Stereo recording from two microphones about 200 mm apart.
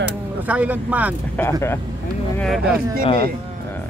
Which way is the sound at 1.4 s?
10° left (ahead or behind).